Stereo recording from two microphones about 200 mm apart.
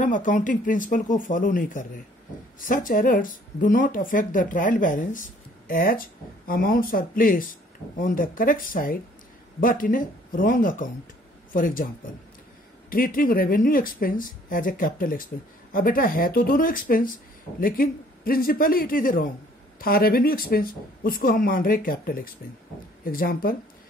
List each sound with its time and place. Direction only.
0.0 s speech: 40° left (ahead or behind)
12.9 s speech: 45° left (ahead or behind)